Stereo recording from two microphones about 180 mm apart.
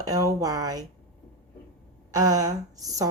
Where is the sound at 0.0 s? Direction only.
20° right (ahead or behind).